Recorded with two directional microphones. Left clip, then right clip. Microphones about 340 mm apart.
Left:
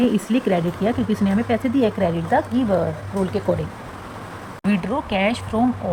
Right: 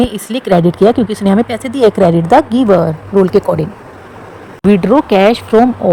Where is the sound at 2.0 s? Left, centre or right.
Right.